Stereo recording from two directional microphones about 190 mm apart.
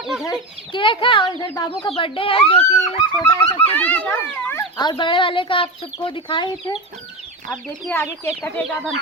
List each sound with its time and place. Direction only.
0.3 s speech: 25° left (ahead or behind)
3.8 s a child's voice: 10° left (ahead or behind)
4.8 s speech: 25° left (ahead or behind)
7.5 s speech: 5° left (ahead or behind)
8.4 s chicken: 5° left (ahead or behind)